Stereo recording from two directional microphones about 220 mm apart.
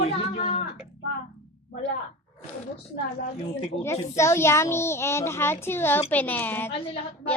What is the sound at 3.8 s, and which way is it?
A child's voice, 10° left (ahead or behind).